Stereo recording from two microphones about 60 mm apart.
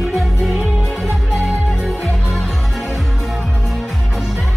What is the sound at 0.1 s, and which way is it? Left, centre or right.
Music, centre.